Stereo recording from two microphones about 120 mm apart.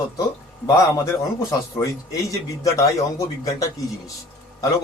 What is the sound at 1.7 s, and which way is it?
A man's voice, 30° left (ahead or behind).